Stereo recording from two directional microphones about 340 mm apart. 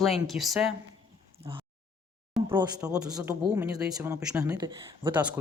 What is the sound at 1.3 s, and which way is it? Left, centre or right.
Speech, centre.